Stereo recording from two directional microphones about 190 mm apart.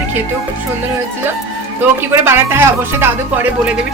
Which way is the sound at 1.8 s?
10° right (ahead or behind).